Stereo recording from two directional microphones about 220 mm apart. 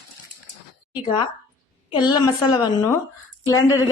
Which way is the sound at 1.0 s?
20° left (ahead or behind).